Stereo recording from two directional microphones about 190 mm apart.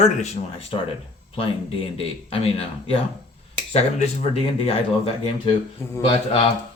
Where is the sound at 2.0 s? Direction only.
30° left (ahead or behind).